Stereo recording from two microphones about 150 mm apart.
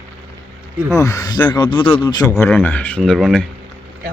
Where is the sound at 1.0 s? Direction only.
25° left (ahead or behind).